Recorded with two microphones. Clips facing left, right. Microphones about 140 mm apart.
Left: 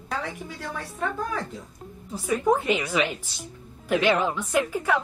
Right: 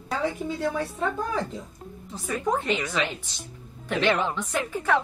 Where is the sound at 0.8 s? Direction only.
25° right (ahead or behind).